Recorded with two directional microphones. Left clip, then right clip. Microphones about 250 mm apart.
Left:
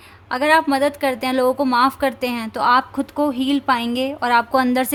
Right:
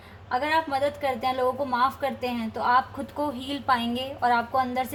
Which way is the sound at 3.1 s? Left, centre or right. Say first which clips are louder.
Left 10 dB; left.